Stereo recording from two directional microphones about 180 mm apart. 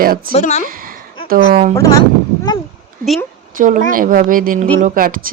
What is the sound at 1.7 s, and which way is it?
Speech, 20° left (ahead or behind).